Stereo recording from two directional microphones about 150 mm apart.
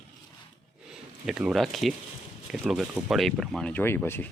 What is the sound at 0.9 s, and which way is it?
Speech, 5° right (ahead or behind).